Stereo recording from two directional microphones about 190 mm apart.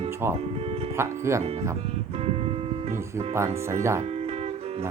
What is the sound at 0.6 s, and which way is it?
Speech, 30° right (ahead or behind).